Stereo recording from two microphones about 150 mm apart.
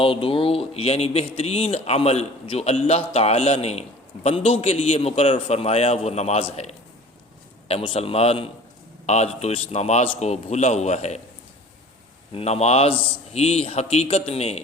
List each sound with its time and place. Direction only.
0.0 s a man's voice: 35° left (ahead or behind)
12.3 s speech: 45° left (ahead or behind)